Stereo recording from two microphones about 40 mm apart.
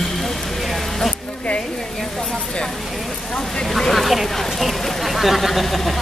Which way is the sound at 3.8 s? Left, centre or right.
Centre.